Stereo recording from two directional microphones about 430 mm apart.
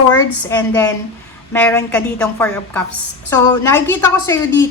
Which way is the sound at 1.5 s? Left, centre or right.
Centre.